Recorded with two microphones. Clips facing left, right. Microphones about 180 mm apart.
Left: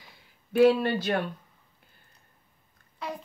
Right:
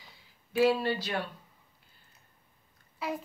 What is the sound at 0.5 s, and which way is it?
Speech, 55° left (ahead or behind).